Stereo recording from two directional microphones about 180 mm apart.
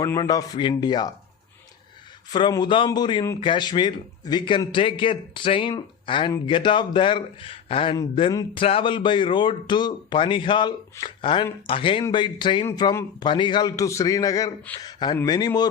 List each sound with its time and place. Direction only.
0.0 s a man's voice: 20° left (ahead or behind)
2.3 s a man's voice: 25° left (ahead or behind)